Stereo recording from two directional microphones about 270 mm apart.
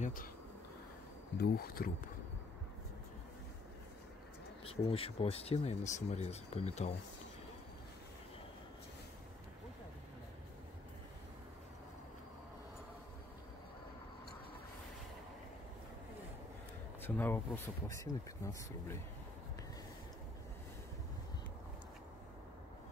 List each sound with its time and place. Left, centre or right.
0.0 s speech: left
1.4 s speech: left
4.6 s speech: left
17.0 s speech: centre